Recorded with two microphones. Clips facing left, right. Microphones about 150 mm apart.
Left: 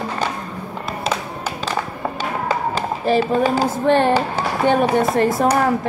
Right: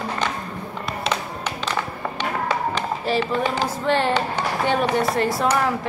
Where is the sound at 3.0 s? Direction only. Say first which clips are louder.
Left 6 dB; 50° left (ahead or behind).